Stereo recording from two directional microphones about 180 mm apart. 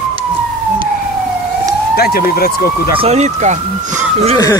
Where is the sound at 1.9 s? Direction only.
60° left (ahead or behind).